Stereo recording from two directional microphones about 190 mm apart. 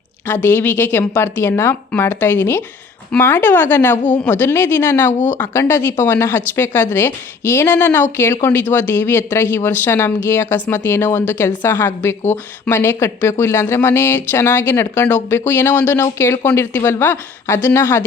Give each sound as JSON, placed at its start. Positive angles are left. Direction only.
{"t": 0.4, "sound": "speech", "side_deg": 10}